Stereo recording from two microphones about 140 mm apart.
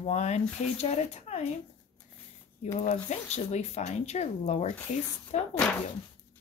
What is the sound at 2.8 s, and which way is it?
Speech, 55° left (ahead or behind).